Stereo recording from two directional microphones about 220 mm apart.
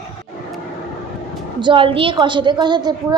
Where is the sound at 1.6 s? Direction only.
20° right (ahead or behind).